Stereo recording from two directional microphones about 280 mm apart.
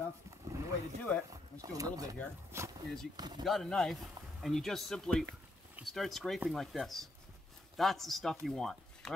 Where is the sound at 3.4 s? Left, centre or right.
Centre.